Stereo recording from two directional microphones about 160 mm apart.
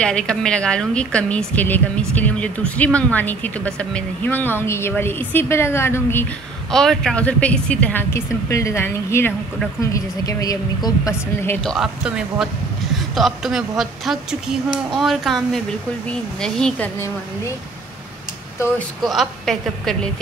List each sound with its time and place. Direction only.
0.0 s a woman's voice: 5° left (ahead or behind)
6.7 s a woman's voice: 5° left (ahead or behind); by 11.5 s 20° left (ahead or behind)
11.6 s a woman's voice: centre (ahead or behind)
19.0 s a woman's voice: centre (ahead or behind)